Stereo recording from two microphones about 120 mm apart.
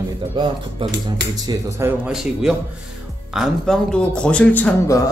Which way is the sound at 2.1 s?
5° right (ahead or behind).